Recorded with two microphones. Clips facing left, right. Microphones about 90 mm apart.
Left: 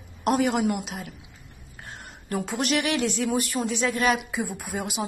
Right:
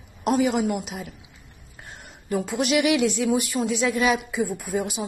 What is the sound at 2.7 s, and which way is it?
Speech, 40° left (ahead or behind).